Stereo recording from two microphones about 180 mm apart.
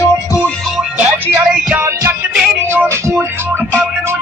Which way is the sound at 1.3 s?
10° right (ahead or behind).